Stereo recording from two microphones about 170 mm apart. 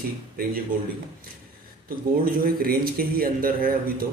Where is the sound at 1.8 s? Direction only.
60° right (ahead or behind).